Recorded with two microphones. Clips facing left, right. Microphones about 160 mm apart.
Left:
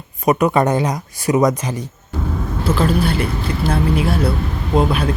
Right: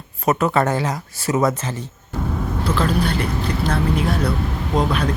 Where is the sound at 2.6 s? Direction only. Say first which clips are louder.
Left 4 dB; 10° left (ahead or behind).